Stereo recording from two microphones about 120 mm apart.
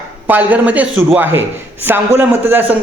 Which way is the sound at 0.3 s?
15° right (ahead or behind).